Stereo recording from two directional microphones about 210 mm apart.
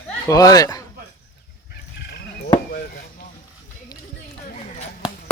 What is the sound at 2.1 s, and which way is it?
Frog, 50° left (ahead or behind).